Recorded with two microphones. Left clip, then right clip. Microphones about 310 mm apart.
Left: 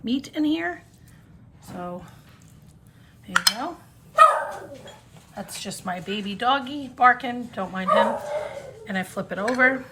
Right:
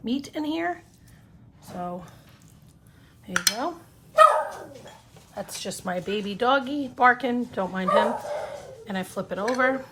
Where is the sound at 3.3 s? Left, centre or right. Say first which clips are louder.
Left 5 dB; right.